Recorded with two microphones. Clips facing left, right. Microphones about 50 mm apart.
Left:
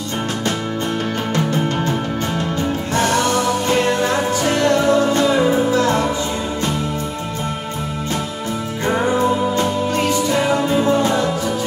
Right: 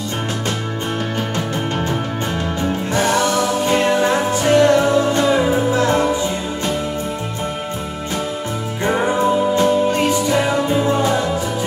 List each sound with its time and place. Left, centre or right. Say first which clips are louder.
2.9 s music: even; right
8.8 s music: even; centre